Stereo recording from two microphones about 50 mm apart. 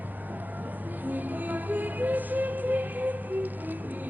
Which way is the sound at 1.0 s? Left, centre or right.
Right.